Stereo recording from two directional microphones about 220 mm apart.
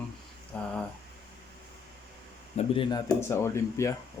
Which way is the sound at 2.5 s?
25° left (ahead or behind).